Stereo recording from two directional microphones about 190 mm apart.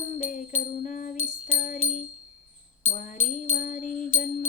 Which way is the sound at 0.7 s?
40° left (ahead or behind).